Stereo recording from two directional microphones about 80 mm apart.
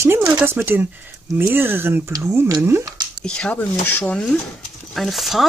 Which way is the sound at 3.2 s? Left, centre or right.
Centre.